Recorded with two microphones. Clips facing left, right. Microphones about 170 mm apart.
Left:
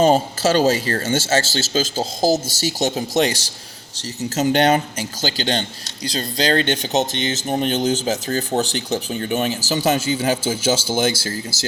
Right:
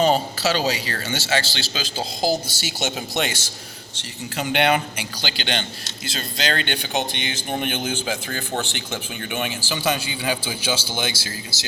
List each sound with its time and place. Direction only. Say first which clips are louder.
0.0 s speech: left 4 dB; 45° left (ahead or behind)